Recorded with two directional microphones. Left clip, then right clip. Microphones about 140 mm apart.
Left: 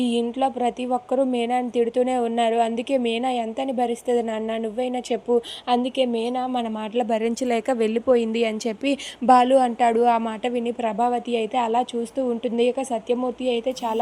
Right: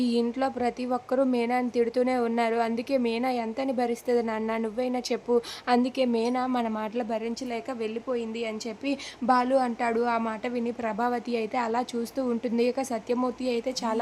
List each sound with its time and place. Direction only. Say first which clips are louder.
0.0 s a woman's voice: left 4 dB; 5° left (ahead or behind)
5.6 s a woman's voice: left 3 dB; 5° left (ahead or behind)
7.1 s a woman's voice: left 9 dB; 35° left (ahead or behind); by 14.0 s 5° left (ahead or behind)